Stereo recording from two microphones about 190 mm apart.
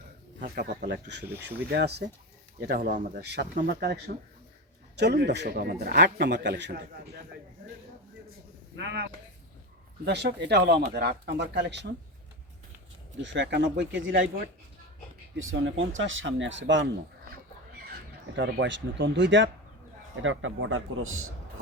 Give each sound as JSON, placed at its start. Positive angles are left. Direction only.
{"t": 0.3, "sound": "speech", "side_deg": -50}
{"t": 0.9, "sound": "a man's voice", "side_deg": -65}
{"t": 8.7, "sound": "a man's voice", "side_deg": -65}
{"t": 13.2, "sound": "speech", "side_deg": -70}
{"t": 15.4, "sound": "speech", "side_deg": -85}
{"t": 18.3, "sound": "speech", "side_deg": -75}
{"t": 20.2, "sound": "a man's voice", "side_deg": -90}